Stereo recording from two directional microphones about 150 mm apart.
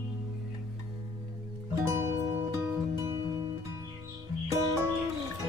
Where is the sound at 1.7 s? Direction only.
20° right (ahead or behind).